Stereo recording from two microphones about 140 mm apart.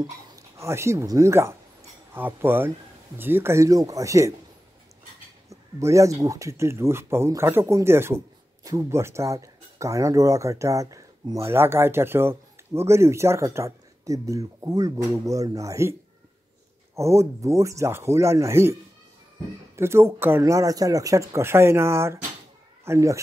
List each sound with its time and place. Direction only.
0.4 s speech: 20° right (ahead or behind)
5.5 s speech: 20° right (ahead or behind)